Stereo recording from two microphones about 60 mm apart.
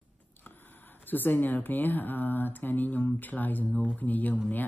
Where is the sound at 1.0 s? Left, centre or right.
Left.